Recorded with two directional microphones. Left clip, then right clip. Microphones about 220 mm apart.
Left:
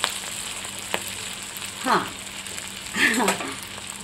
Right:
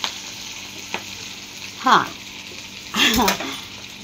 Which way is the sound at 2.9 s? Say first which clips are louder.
Right 3 dB; 15° right (ahead or behind).